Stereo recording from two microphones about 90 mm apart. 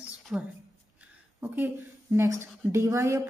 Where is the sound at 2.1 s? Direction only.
30° right (ahead or behind).